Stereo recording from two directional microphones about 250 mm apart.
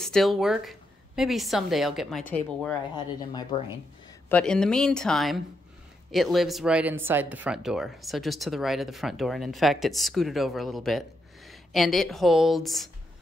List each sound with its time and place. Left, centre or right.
0.0 s speech: centre
3.2 s speech: centre
4.3 s speech: centre